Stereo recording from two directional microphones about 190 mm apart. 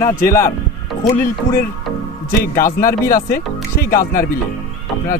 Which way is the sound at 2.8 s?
50° left (ahead or behind).